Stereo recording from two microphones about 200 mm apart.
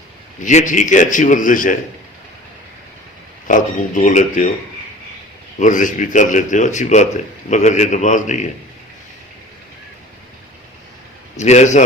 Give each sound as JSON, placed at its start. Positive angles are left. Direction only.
{"t": 0.4, "sound": "speech", "side_deg": 40}
{"t": 3.5, "sound": "speech", "side_deg": 40}
{"t": 5.5, "sound": "speech", "side_deg": 40}
{"t": 11.3, "sound": "speech", "side_deg": 35}